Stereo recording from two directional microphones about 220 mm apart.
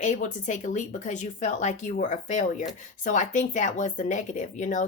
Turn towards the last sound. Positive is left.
turn(degrees=35)  # may be behind; listen again after turning